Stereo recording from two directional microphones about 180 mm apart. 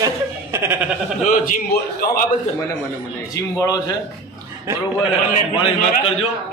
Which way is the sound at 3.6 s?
20° left (ahead or behind).